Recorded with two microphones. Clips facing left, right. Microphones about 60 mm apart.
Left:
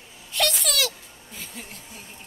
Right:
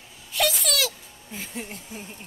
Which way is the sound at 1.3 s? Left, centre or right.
Right.